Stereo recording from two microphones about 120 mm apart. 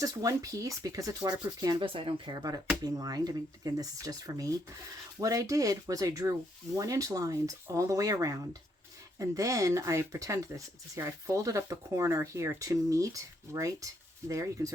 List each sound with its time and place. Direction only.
0.0 s speech: 30° right (ahead or behind)
1.8 s speech: 45° right (ahead or behind); by 14.7 s 25° right (ahead or behind)